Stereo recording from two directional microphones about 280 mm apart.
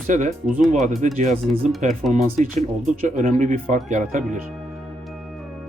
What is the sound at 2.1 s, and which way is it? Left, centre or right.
Speech, right.